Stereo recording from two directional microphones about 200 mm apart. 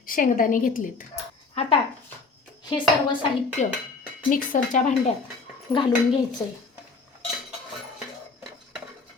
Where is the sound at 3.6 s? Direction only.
35° left (ahead or behind).